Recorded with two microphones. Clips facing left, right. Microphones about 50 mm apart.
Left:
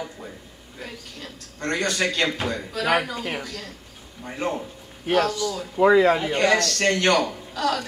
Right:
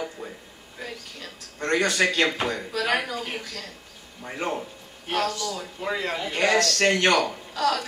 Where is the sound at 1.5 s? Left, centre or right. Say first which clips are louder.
Right 2 dB; centre.